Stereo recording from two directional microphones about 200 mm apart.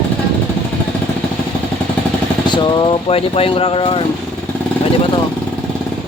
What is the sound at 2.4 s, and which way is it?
Speech, 25° left (ahead or behind).